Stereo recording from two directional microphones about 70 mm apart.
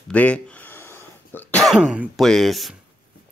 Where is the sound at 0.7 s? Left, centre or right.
Left.